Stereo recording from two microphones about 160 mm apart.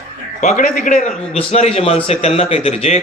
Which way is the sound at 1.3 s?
40° left (ahead or behind).